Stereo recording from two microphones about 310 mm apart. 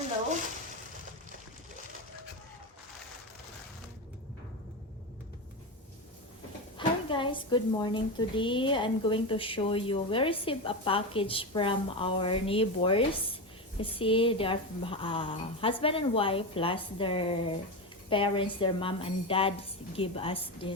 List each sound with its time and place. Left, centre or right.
6.7 s a woman's voice: centre